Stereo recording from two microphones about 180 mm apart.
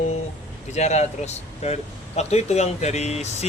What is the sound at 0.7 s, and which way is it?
Speech, 40° left (ahead or behind).